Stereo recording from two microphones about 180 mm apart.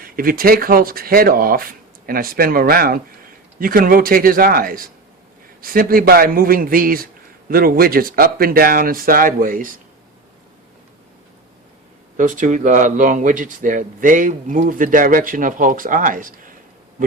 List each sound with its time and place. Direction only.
0.0 s speech: 55° right (ahead or behind)
12.1 s speech: 45° right (ahead or behind)